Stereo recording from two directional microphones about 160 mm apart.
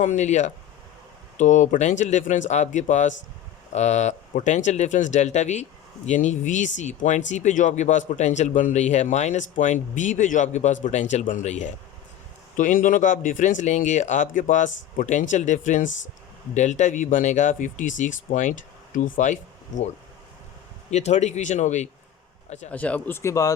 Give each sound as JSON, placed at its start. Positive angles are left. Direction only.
{"t": 0.0, "sound": "speech", "side_deg": 50}
{"t": 20.9, "sound": "speech", "side_deg": 45}
{"t": 22.7, "sound": "speech", "side_deg": 10}